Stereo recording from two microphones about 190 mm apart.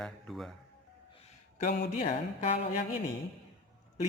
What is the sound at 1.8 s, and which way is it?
Speech, 50° left (ahead or behind).